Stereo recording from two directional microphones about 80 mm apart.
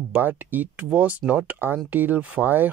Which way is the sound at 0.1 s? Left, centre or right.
Right.